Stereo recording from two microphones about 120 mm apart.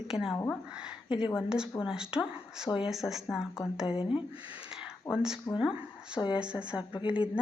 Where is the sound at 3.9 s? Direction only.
50° left (ahead or behind).